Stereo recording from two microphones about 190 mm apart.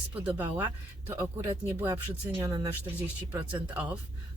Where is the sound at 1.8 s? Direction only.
10° right (ahead or behind).